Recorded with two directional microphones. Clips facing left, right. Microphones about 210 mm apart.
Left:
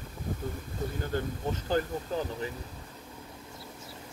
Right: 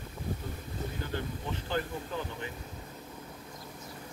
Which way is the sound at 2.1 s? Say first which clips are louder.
Left 6 dB; 40° left (ahead or behind).